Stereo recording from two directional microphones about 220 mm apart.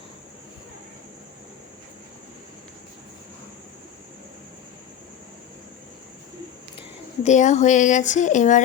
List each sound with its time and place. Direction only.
6.7 s speech: 30° left (ahead or behind)